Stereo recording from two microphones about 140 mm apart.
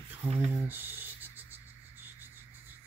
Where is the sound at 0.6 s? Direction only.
15° right (ahead or behind).